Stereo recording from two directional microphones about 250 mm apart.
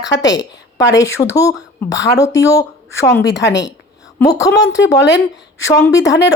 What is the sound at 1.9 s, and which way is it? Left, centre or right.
Speech, left.